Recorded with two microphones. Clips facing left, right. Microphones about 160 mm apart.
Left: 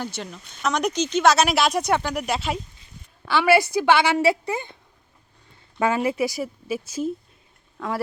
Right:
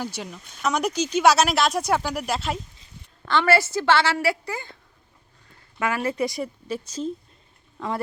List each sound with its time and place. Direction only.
0.0 s speech: 5° right (ahead or behind); by 4.8 s 20° left (ahead or behind)
6.0 s speech: 10° left (ahead or behind)